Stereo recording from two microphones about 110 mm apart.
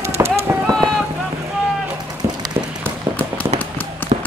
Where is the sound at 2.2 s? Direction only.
25° right (ahead or behind).